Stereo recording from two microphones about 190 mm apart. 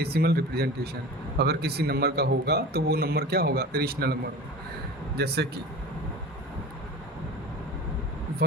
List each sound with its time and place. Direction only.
0.0 s a man's voice: 55° right (ahead or behind)